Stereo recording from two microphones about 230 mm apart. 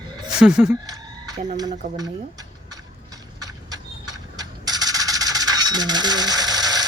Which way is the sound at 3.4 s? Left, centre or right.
Centre.